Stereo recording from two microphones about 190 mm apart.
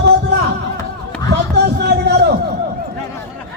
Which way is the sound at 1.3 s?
60° right (ahead or behind).